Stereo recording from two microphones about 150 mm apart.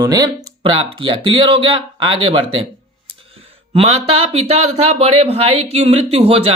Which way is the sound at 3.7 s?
40° right (ahead or behind).